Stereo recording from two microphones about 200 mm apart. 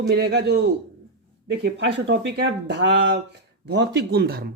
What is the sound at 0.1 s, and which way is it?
Speech, 55° right (ahead or behind).